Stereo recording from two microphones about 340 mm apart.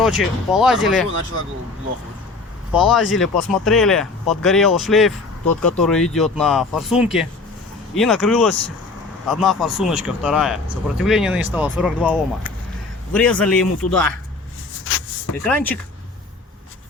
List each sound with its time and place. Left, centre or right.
0.0 s speech: centre
2.7 s speech: centre
13.1 s speech: centre
14.9 s a sound: left
15.4 s speech: centre